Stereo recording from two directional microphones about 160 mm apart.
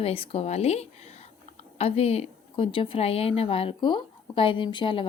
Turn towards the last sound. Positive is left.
turn(degrees=30)  # may be behind; listen again after turning